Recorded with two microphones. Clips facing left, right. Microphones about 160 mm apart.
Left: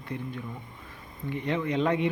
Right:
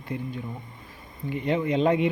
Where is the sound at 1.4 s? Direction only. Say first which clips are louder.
Right 4 dB; 25° right (ahead or behind).